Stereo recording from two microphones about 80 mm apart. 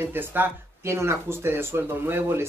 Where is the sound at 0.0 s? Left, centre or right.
Right.